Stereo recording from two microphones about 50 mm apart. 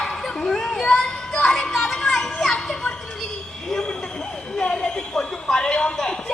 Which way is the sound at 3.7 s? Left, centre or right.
Centre.